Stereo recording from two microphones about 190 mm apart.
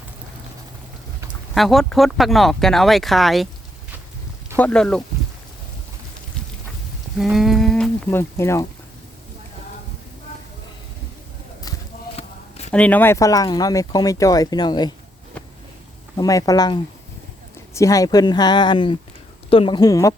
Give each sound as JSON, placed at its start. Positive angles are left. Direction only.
{"t": 1.5, "sound": "speech", "side_deg": 0}
{"t": 4.5, "sound": "speech", "side_deg": 5}
{"t": 7.2, "sound": "speech", "side_deg": 0}
{"t": 8.2, "sound": "speech", "side_deg": 15}
{"t": 12.1, "sound": "a sound", "side_deg": 35}
{"t": 12.7, "sound": "speech", "side_deg": 10}
{"t": 16.1, "sound": "speech", "side_deg": 20}